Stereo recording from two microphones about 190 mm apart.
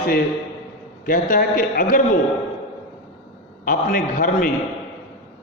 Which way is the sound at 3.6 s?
45° left (ahead or behind).